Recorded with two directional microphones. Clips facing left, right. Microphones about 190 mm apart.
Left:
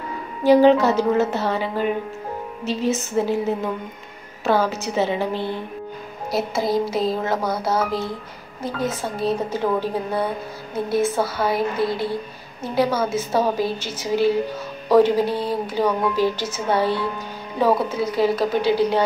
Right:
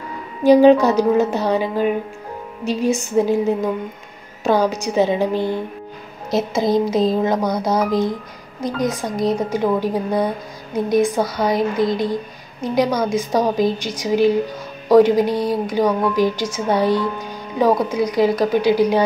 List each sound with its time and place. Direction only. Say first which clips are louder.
0.4 s a woman's voice: right 3 dB; 15° right (ahead or behind)